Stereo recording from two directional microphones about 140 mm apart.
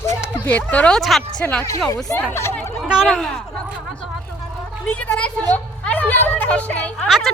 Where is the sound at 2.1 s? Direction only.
15° left (ahead or behind).